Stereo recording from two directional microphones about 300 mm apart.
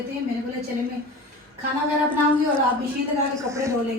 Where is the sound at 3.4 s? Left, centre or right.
Centre.